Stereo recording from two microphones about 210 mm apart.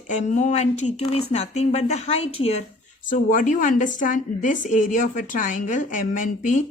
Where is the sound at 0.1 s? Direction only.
35° left (ahead or behind).